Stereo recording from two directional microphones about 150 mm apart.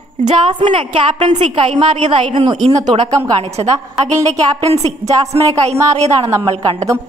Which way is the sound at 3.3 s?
45° right (ahead or behind).